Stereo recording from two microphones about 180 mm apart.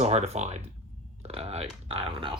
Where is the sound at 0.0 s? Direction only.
35° right (ahead or behind).